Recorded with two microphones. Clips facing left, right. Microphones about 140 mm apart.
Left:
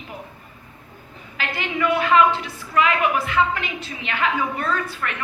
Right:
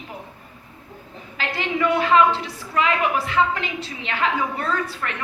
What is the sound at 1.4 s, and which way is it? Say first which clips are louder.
A woman's voice: right 1 dB; 30° right (ahead or behind).